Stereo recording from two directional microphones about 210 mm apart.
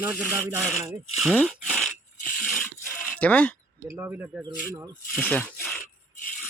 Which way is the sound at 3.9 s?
10° right (ahead or behind).